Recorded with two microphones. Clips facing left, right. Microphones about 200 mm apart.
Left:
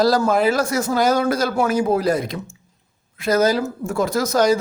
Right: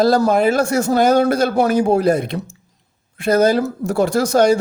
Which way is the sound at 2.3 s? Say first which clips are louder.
Right 4 dB; 40° right (ahead or behind).